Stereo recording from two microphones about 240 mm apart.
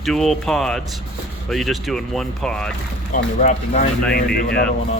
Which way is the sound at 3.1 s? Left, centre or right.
Left.